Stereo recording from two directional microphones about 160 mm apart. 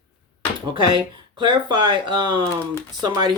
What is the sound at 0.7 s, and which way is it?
Speech, 30° right (ahead or behind).